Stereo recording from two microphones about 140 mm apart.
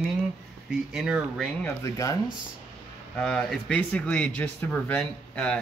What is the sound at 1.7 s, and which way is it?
Speech, 25° left (ahead or behind).